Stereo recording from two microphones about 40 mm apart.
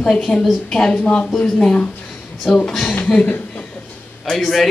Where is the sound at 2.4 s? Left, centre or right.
Centre.